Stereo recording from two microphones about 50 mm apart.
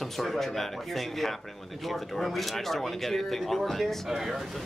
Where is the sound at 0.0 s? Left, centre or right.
Centre.